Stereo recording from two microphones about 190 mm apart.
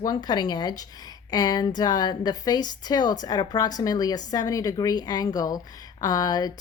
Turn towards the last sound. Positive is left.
turn(degrees=20)  # may be behind; listen again after turning